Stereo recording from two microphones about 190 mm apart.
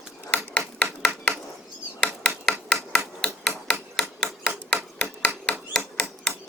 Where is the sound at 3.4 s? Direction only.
5° left (ahead or behind).